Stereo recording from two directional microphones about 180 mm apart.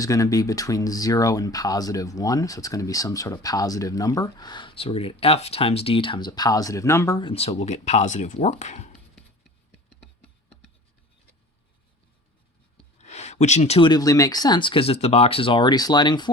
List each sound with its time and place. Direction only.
0.0 s speech: 20° left (ahead or behind)
7.3 s speech: 35° left (ahead or behind)
13.0 s speech: 40° left (ahead or behind)